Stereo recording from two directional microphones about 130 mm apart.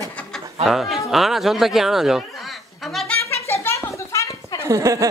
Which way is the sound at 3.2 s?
20° left (ahead or behind).